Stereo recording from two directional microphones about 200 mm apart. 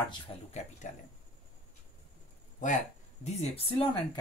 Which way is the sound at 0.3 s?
25° left (ahead or behind).